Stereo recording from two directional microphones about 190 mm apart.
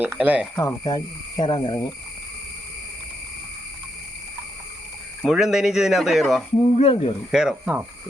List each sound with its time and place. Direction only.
0.0 s speech: 10° right (ahead or behind)
0.5 s speech: 15° left (ahead or behind)
5.2 s speech: centre (ahead or behind)
6.6 s speech: 30° left (ahead or behind)
7.3 s speech: 5° right (ahead or behind)